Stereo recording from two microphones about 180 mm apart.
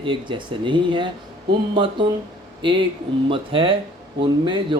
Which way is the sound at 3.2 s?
30° right (ahead or behind).